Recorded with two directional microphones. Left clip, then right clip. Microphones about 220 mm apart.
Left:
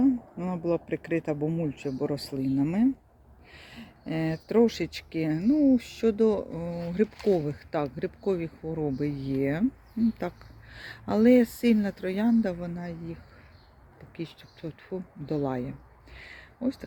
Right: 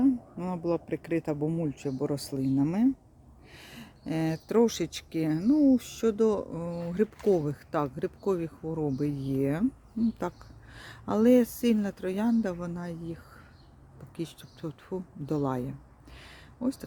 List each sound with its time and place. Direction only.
0.0 s speech: 10° right (ahead or behind)
14.2 s speech: 20° right (ahead or behind)
16.1 s a sound: 10° right (ahead or behind)